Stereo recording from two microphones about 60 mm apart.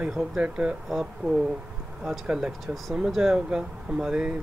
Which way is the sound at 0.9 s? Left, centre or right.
Centre.